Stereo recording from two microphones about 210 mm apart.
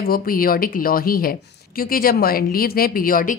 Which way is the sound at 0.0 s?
45° left (ahead or behind).